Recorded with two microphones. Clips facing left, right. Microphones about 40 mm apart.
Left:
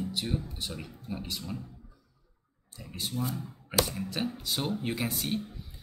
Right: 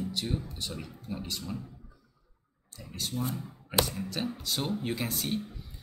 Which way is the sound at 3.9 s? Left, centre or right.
Centre.